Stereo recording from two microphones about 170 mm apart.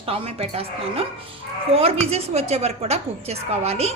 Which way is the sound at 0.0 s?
35° right (ahead or behind).